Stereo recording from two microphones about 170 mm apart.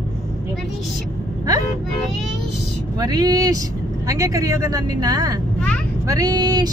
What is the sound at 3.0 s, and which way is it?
Speech, 20° right (ahead or behind).